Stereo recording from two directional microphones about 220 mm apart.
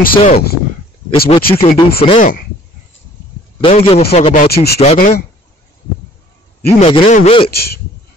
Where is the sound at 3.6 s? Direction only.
25° left (ahead or behind); by 4.8 s 45° left (ahead or behind).